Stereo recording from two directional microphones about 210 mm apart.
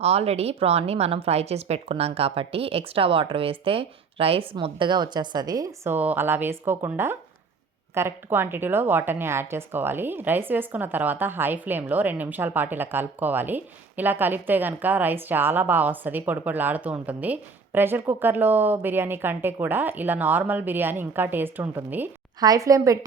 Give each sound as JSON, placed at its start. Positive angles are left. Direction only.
{"t": 0.0, "sound": "a woman's voice", "side_deg": -30}